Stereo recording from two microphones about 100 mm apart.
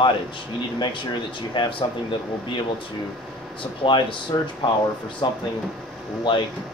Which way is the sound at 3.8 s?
60° left (ahead or behind).